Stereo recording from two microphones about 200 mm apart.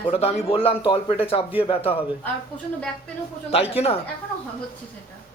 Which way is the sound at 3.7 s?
30° left (ahead or behind).